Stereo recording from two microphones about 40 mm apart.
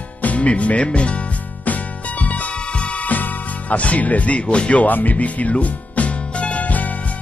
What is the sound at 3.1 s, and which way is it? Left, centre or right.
Speech, left.